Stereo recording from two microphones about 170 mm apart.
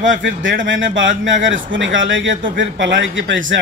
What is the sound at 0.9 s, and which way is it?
Speech, 90° right.